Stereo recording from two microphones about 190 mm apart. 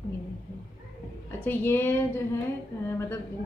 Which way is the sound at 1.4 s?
10° left (ahead or behind).